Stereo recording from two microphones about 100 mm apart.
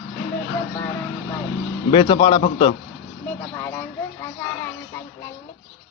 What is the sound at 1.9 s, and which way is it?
Speech, 65° left (ahead or behind).